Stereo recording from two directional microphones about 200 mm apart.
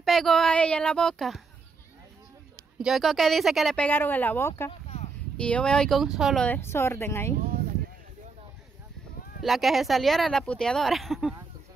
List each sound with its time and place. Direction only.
0.0 s speech: centre (ahead or behind)
2.8 s speech: centre (ahead or behind)
4.8 s a sound: 35° left (ahead or behind)
5.4 s speech: 5° left (ahead or behind)
9.4 s speech: centre (ahead or behind)